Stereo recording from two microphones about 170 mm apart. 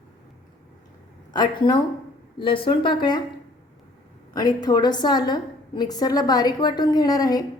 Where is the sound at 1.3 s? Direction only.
25° left (ahead or behind).